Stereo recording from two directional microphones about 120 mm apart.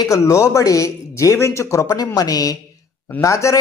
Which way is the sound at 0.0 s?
25° left (ahead or behind).